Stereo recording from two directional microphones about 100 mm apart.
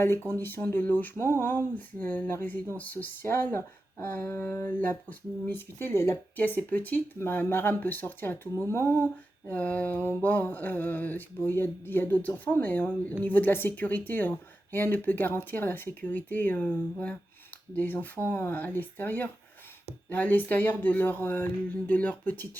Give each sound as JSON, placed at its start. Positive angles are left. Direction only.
{"t": 0.3, "sound": "speech", "side_deg": 20}